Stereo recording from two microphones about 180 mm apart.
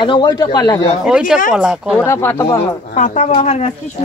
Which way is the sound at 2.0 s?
15° left (ahead or behind).